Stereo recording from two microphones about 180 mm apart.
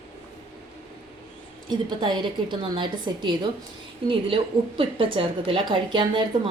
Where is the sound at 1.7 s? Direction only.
25° right (ahead or behind).